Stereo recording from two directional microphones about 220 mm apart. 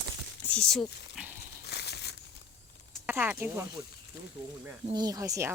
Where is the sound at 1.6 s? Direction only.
50° left (ahead or behind).